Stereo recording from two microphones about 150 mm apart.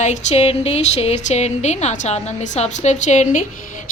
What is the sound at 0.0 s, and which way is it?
A woman's voice, 50° left (ahead or behind).